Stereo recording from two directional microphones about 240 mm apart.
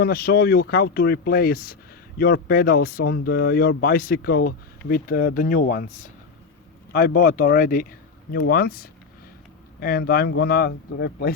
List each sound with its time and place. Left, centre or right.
0.0 s speech: left